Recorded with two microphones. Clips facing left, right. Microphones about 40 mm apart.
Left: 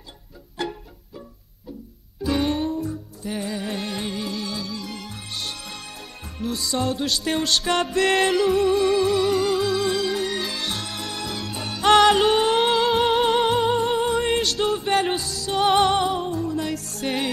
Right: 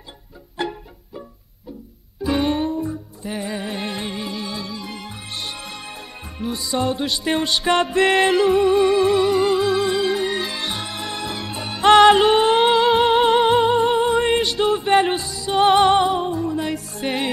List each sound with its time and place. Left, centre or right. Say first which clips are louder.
0.6 s music: right 3 dB; centre
2.2 s music: right 2 dB; centre